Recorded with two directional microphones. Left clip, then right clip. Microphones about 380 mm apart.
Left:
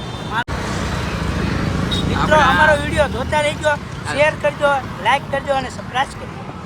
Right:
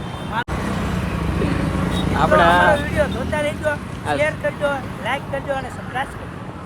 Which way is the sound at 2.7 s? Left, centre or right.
Left.